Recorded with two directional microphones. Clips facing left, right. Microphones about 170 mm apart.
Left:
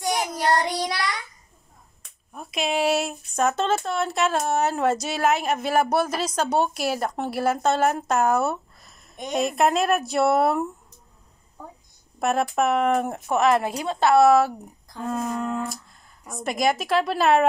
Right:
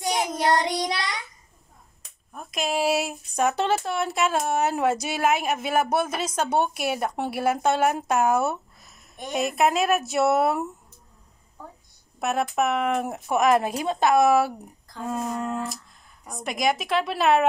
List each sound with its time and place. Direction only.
0.0 s child singing: 20° right (ahead or behind)
2.3 s speech: centre (ahead or behind)
12.2 s speech: centre (ahead or behind)